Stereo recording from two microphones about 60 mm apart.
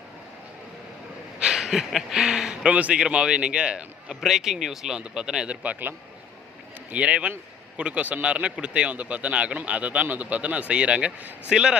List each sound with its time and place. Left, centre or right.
1.4 s speech: centre
6.9 s speech: right
11.5 s speech: centre